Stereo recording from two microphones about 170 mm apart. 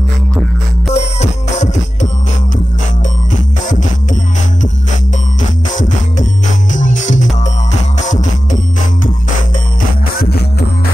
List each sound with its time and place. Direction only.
0.9 s music: 45° left (ahead or behind)
3.6 s music: 50° left (ahead or behind)
5.4 s music: 50° left (ahead or behind)
10.1 s music: 70° left (ahead or behind)